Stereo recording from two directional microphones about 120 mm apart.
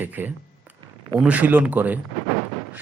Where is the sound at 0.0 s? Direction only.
15° right (ahead or behind).